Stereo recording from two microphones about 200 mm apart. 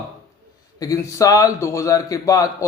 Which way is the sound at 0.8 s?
15° left (ahead or behind).